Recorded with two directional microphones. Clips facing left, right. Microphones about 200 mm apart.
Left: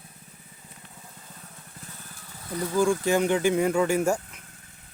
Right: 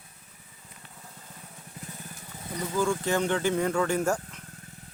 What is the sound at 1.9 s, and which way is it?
Vehicle, 20° right (ahead or behind).